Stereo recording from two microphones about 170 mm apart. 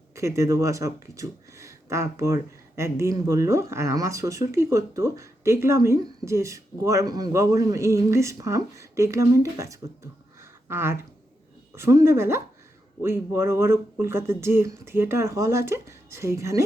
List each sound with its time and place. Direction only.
0.2 s speech: 20° right (ahead or behind)